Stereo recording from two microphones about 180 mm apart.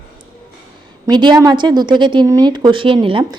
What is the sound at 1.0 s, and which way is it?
A woman's voice, 25° right (ahead or behind).